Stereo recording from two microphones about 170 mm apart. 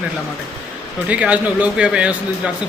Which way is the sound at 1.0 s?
10° right (ahead or behind).